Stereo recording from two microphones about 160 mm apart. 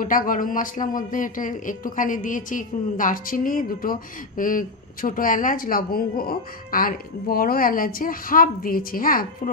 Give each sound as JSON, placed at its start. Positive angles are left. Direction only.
{"t": 0.0, "sound": "speech", "side_deg": 60}